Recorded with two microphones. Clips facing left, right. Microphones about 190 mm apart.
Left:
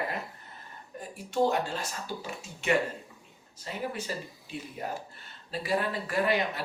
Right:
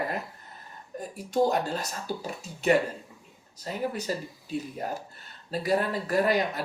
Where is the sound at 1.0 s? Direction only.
40° right (ahead or behind).